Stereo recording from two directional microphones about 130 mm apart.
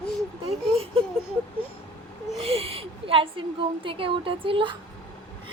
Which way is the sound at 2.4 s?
50° right (ahead or behind).